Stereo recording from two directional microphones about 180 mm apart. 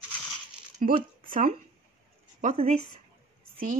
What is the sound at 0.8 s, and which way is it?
Speech, 40° right (ahead or behind).